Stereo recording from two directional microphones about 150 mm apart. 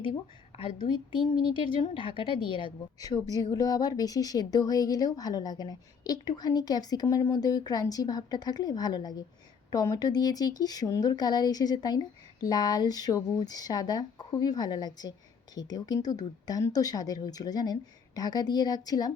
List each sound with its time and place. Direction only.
0.0 s a woman's voice: 40° left (ahead or behind)